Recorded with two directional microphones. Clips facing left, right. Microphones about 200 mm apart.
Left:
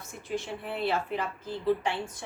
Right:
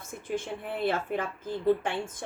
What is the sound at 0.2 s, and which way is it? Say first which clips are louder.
Speech: right 1 dB; 50° right (ahead or behind).